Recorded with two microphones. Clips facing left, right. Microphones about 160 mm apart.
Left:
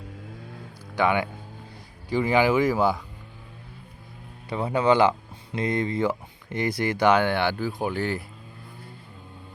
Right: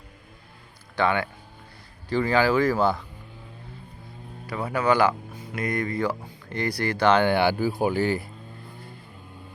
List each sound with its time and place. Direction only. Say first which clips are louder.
0.9 s speech: left 1 dB; 15° left (ahead or behind)
4.4 s speech: left 2 dB; 25° left (ahead or behind)
7.2 s speech: right 3 dB; centre (ahead or behind)